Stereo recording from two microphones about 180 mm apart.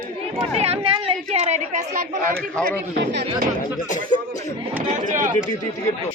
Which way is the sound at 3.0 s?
75° right (ahead or behind).